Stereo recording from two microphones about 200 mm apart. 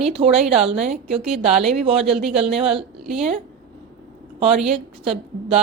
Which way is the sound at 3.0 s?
Centre (ahead or behind).